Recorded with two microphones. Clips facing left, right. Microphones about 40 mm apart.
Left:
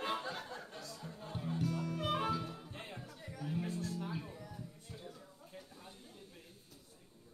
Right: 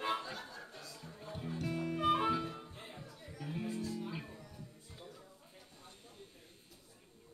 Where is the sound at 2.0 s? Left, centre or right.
Centre.